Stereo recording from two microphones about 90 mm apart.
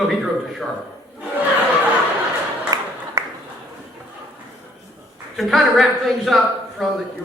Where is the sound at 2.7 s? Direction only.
45° right (ahead or behind).